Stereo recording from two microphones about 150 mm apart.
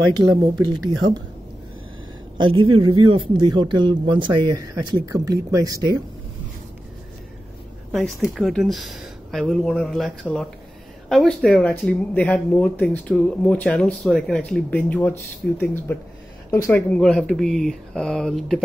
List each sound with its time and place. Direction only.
0.1 s speech: 30° right (ahead or behind)
2.4 s speech: 30° right (ahead or behind)
7.9 s speech: centre (ahead or behind)